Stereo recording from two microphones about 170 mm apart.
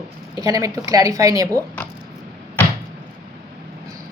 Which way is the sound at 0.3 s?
20° right (ahead or behind).